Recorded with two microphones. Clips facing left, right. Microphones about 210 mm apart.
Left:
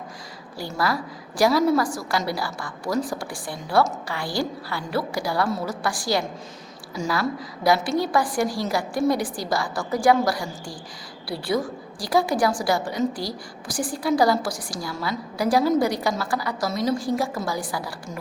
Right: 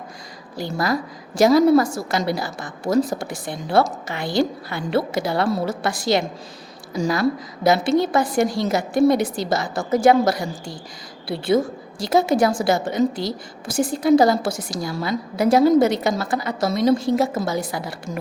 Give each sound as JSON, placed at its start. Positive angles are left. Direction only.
{"t": 1.4, "sound": "a woman's voice", "side_deg": -20}
{"t": 5.5, "sound": "a woman's voice", "side_deg": -35}
{"t": 5.8, "sound": "a woman's voice", "side_deg": -20}